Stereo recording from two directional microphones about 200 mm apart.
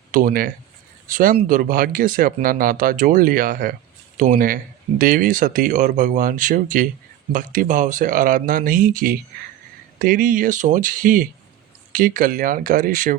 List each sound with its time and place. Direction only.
0.1 s speech: 40° right (ahead or behind)